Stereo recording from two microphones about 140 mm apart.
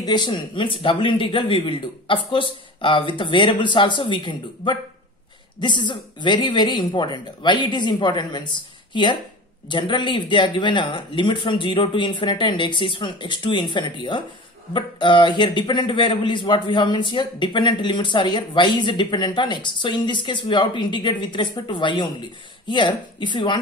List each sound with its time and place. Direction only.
0.0 s a man's voice: 30° left (ahead or behind)